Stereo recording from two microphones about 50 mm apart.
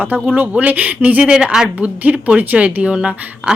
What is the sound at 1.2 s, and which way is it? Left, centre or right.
Speech, centre.